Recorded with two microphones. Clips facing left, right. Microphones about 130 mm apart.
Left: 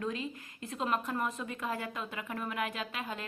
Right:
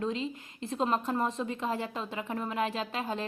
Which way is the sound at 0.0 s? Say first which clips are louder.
Right 4 dB; 25° right (ahead or behind).